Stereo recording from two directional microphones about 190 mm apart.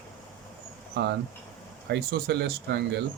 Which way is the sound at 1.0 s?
60° right (ahead or behind).